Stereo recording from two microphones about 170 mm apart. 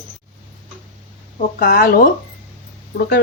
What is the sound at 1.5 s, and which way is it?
Speech, 65° left (ahead or behind).